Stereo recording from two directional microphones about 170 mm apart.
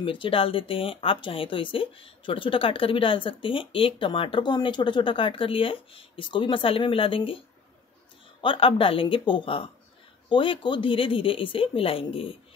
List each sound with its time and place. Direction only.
0.0 s speech: 30° left (ahead or behind)